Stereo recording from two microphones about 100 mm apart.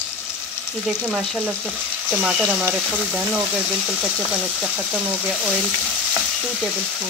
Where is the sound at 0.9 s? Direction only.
10° right (ahead or behind).